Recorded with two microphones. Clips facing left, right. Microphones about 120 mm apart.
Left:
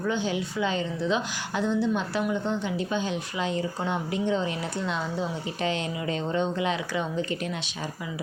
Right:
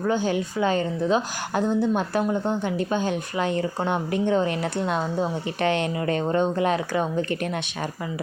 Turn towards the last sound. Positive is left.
turn(degrees=-55)  # may be behind; listen again after turning